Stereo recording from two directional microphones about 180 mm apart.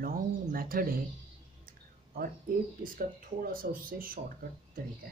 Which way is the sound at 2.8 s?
50° right (ahead or behind).